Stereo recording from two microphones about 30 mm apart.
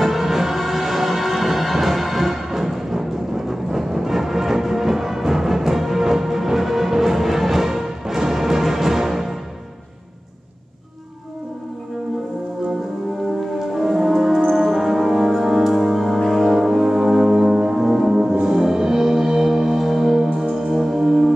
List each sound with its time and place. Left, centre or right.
0.0 s music: centre
13.6 s music: centre
18.3 s music: centre